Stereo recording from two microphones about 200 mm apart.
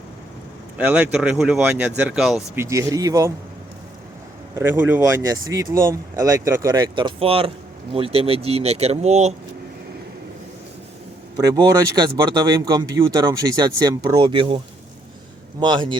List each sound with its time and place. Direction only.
0.8 s speech: 5° right (ahead or behind)
2.6 s speech: 15° right (ahead or behind)
4.5 s speech: 10° right (ahead or behind); by 9.3 s 35° right (ahead or behind)
11.4 s speech: 20° right (ahead or behind)
15.6 s speech: 25° right (ahead or behind)